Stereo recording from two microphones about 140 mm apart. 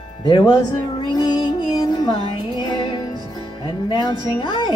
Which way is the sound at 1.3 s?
30° left (ahead or behind).